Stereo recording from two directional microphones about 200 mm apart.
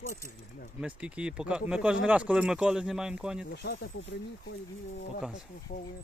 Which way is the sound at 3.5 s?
55° left (ahead or behind).